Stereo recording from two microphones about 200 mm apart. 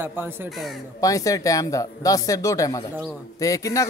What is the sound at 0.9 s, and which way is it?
Speech, 15° left (ahead or behind).